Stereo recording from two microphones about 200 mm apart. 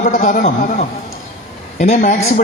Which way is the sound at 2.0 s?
40° left (ahead or behind).